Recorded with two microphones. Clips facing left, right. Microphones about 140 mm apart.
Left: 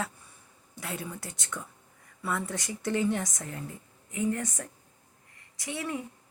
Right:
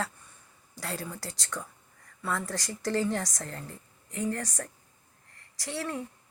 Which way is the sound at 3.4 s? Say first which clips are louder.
Left 2 dB; 10° left (ahead or behind).